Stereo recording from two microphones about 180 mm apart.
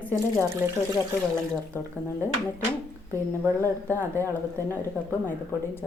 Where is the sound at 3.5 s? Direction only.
15° left (ahead or behind).